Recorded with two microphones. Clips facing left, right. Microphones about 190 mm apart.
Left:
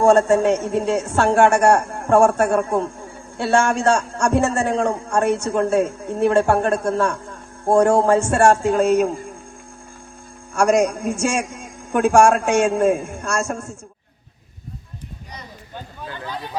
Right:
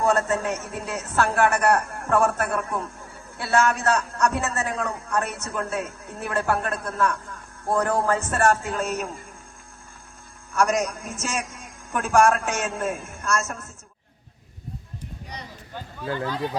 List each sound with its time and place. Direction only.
0.0 s a man's voice: 30° left (ahead or behind)
10.5 s a man's voice: 30° left (ahead or behind)